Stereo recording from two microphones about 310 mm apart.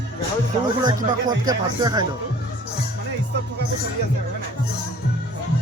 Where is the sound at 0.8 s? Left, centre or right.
Centre.